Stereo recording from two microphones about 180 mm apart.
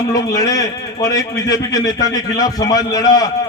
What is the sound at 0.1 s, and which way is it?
A man's voice, 20° left (ahead or behind).